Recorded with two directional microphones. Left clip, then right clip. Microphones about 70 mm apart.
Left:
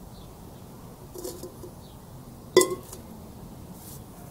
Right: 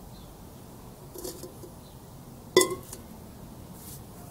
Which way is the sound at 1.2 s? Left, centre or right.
Centre.